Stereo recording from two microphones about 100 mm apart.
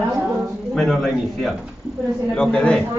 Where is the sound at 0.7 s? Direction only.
5° left (ahead or behind).